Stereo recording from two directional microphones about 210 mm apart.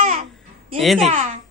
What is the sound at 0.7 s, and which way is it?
Speech, centre (ahead or behind).